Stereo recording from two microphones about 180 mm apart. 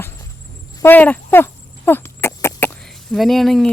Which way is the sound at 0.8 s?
10° left (ahead or behind).